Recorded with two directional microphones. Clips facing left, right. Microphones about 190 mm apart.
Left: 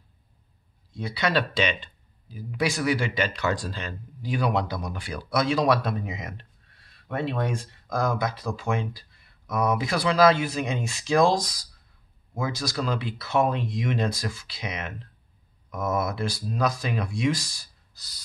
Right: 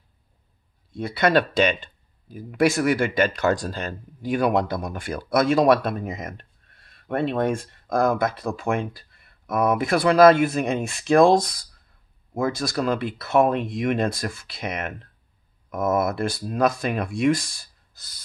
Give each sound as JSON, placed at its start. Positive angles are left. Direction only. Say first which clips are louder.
{"t": 0.9, "sound": "speech", "louder": "right 6 dB", "side_deg": -50}